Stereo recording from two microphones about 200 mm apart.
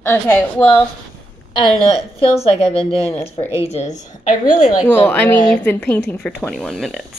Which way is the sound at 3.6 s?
35° left (ahead or behind).